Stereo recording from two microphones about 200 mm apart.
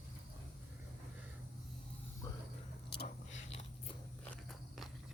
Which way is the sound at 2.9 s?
55° left (ahead or behind).